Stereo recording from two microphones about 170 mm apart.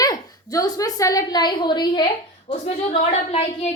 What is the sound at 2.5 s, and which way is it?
A woman's voice, 40° left (ahead or behind).